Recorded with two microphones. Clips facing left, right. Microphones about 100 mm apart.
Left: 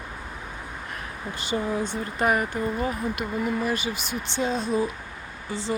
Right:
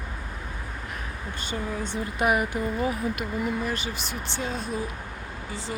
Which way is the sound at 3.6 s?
15° left (ahead or behind).